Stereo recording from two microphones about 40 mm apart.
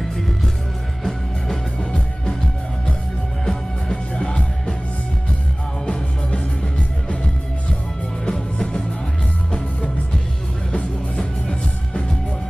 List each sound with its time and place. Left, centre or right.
1.8 s music: centre
3.4 s music: centre
8.3 s music: left
9.5 s music: left